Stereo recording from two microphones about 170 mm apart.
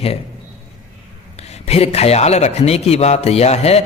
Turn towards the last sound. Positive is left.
turn(degrees=40)  # may be behind; listen again after turning